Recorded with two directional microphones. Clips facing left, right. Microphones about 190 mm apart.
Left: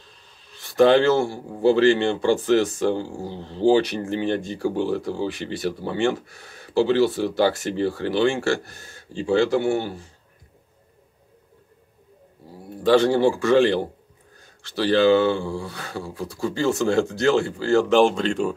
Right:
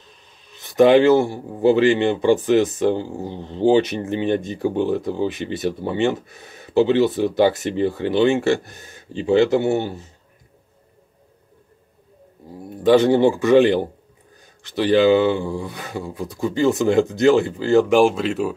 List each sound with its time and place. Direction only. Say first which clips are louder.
0.0 s speech: right 2 dB; 20° right (ahead or behind)
12.5 s speech: right 3 dB; 20° right (ahead or behind)